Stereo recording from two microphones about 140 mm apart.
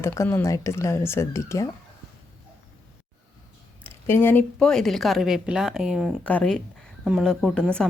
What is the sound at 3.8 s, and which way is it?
A woman's voice, 15° left (ahead or behind).